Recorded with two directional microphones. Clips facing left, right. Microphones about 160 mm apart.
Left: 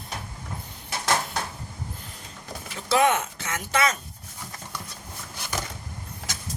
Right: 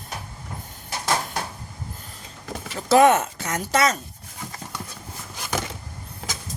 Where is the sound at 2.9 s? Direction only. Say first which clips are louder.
Right 6 dB; 40° right (ahead or behind).